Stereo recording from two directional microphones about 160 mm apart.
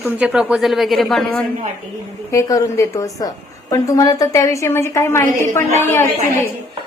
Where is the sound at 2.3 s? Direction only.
20° left (ahead or behind).